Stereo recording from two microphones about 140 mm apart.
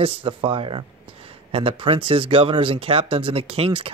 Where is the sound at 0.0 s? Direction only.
40° right (ahead or behind).